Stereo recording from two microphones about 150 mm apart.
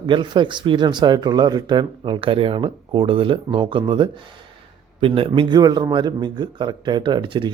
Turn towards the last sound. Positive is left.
turn(degrees=-30)  # may be behind; listen again after turning